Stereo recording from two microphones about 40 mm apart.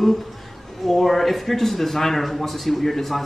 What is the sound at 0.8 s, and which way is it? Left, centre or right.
Speech, centre.